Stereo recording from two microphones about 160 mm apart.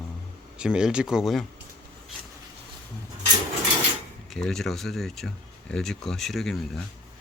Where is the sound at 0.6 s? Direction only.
5° right (ahead or behind).